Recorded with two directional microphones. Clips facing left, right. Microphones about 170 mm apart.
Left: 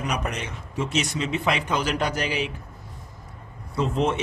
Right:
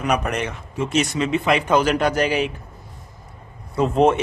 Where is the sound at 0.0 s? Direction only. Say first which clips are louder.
Right 7 dB; 60° right (ahead or behind).